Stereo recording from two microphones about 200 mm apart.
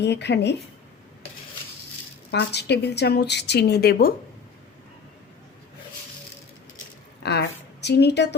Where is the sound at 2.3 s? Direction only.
55° left (ahead or behind).